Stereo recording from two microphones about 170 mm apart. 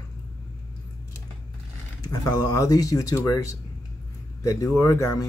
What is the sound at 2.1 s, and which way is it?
Speech, 20° left (ahead or behind).